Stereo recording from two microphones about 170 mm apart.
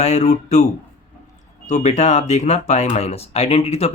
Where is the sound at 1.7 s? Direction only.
40° left (ahead or behind).